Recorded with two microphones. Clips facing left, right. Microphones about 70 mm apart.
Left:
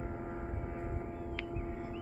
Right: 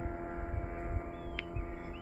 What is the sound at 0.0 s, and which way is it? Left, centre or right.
Vehicle, right.